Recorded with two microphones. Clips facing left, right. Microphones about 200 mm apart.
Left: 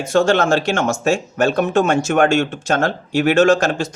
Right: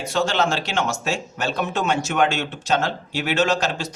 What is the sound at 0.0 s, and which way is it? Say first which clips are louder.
Speech: left 6 dB; 50° left (ahead or behind).